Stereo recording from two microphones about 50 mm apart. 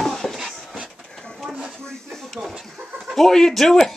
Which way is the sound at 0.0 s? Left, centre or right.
Centre.